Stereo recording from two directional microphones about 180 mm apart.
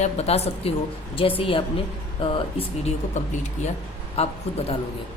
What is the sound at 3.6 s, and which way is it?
Speech, 40° left (ahead or behind).